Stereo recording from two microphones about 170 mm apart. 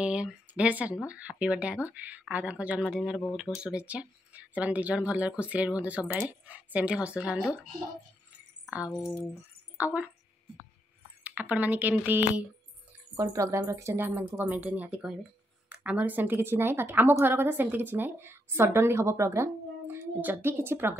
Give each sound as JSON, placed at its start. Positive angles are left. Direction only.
{"t": 0.0, "sound": "a woman's voice", "side_deg": -5}
{"t": 9.8, "sound": "a woman's voice", "side_deg": -10}
{"t": 11.2, "sound": "a woman's voice", "side_deg": -10}